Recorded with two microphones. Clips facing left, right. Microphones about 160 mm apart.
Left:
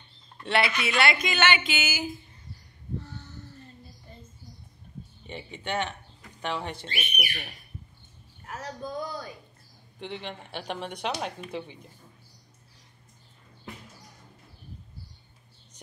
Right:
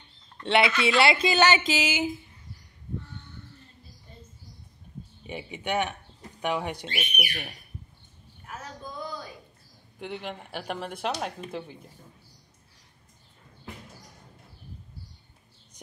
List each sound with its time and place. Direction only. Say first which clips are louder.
0.5 s speech: right 4 dB; 20° right (ahead or behind)
3.0 s a sound: left 2 dB; 40° left (ahead or behind)
5.2 s speech: right 3 dB; 10° right (ahead or behind)
9.9 s speech: right 1 dB; 5° right (ahead or behind)